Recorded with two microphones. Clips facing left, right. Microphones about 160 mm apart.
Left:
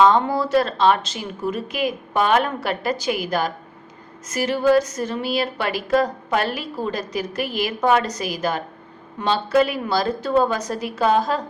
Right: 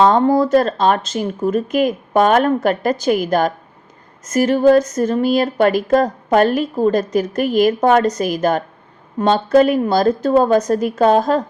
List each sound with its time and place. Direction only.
0.0 s a woman's voice: 45° right (ahead or behind)